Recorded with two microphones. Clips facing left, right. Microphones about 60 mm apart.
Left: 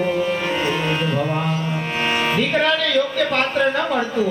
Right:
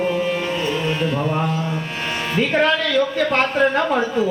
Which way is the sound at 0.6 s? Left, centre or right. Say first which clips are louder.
Even; left.